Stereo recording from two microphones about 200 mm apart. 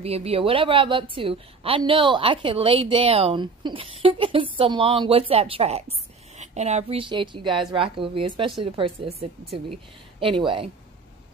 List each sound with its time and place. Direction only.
0.0 s a woman's voice: 30° right (ahead or behind)
10.2 s a woman's voice: 25° right (ahead or behind)